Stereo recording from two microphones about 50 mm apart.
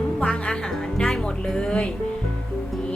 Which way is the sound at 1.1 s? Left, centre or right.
Centre.